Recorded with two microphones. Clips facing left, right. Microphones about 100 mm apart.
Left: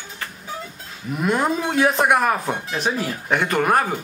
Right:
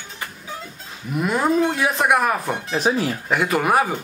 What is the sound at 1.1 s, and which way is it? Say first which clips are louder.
Speech: right 2 dB; centre (ahead or behind).